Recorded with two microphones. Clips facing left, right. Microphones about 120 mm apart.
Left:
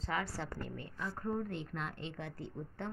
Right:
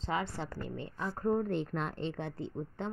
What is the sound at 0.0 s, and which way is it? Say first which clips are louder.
A woman's voice: right 3 dB; 20° right (ahead or behind).